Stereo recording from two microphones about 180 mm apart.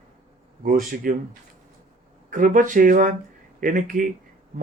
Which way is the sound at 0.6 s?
50° right (ahead or behind).